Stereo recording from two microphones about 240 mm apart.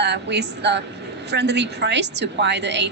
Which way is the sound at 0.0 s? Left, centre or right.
Right.